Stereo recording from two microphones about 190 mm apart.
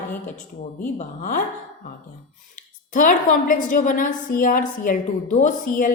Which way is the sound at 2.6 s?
45° left (ahead or behind).